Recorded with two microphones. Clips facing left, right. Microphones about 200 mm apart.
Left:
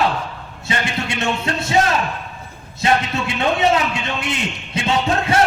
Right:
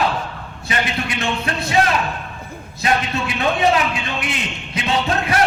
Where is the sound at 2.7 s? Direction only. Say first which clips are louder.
Left 2 dB; 25° left (ahead or behind).